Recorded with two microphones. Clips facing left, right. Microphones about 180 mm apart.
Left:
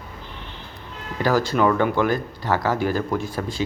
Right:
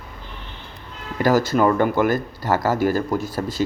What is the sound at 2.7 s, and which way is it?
Speech, 45° right (ahead or behind).